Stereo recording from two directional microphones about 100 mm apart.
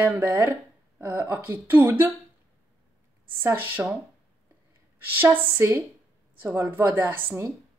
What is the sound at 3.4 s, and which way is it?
Speech, 20° right (ahead or behind).